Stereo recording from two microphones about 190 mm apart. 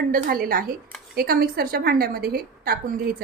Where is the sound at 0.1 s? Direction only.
50° right (ahead or behind).